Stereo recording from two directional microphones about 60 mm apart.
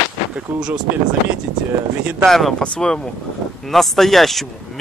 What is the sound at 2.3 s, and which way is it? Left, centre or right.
Speech, centre.